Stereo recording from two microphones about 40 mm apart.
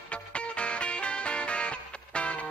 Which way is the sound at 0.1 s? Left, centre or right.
Left.